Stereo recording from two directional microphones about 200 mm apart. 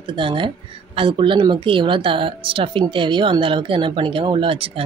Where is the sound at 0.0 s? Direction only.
25° right (ahead or behind).